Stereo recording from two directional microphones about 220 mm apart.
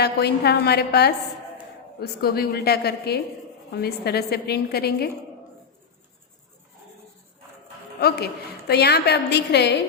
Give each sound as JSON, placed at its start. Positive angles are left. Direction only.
{"t": 0.0, "sound": "a woman's voice", "side_deg": 50}
{"t": 8.0, "sound": "a woman's voice", "side_deg": 45}